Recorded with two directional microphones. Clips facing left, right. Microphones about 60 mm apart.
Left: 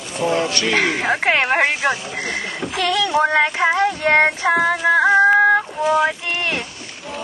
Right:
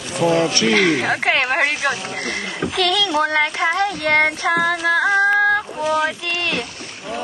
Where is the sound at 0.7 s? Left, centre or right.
Centre.